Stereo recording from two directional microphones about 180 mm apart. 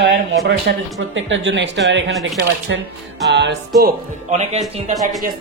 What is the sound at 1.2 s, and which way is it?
Speech, 90° right.